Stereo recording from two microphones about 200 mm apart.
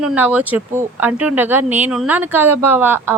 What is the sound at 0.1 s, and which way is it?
Speech, 5° right (ahead or behind).